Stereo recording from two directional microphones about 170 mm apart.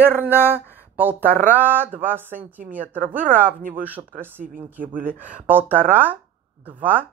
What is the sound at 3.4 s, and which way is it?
Speech, 55° right (ahead or behind).